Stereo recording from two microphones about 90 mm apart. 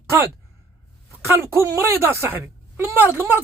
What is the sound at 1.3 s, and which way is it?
A woman's voice, 30° right (ahead or behind).